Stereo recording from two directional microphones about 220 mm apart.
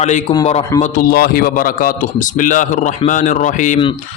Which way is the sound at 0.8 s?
40° left (ahead or behind).